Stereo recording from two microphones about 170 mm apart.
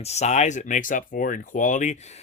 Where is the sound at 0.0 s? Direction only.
40° left (ahead or behind).